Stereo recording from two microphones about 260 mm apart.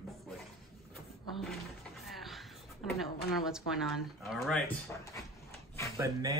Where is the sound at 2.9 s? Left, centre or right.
Centre.